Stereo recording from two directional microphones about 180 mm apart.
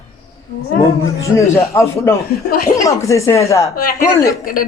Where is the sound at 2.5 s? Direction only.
55° left (ahead or behind).